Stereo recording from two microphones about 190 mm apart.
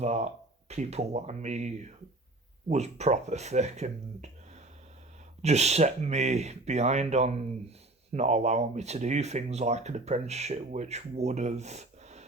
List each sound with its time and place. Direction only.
0.0 s speech: 35° right (ahead or behind)